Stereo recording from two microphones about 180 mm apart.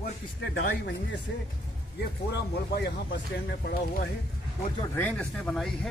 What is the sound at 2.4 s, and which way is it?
Speech, 65° left (ahead or behind).